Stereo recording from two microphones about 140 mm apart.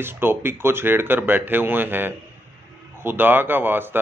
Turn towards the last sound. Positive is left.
turn(degrees=-15)  # may be behind; listen again after turning